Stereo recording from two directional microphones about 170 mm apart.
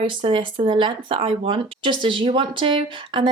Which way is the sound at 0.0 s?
30° right (ahead or behind).